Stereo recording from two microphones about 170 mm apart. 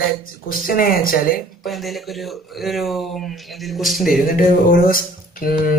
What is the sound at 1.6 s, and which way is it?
Speech, centre (ahead or behind).